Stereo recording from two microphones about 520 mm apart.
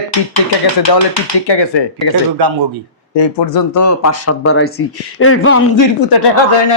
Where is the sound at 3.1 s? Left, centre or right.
Left.